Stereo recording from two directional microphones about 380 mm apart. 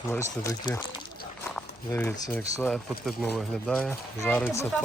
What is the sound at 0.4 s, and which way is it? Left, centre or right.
Speech, centre.